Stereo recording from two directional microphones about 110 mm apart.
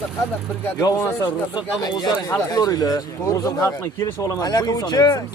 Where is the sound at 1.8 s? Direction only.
35° left (ahead or behind).